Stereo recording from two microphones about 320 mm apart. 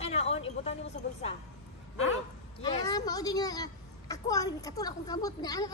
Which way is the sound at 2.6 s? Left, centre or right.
Centre.